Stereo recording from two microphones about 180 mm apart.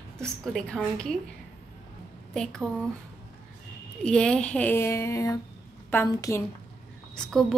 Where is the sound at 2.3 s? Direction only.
5° left (ahead or behind).